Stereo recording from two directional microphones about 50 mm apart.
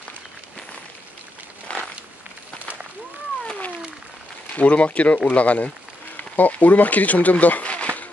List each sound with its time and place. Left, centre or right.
1.7 s a sound: left
3.4 s cat: left
4.6 s speech: left